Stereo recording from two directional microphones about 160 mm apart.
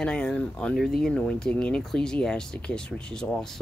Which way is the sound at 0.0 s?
5° left (ahead or behind).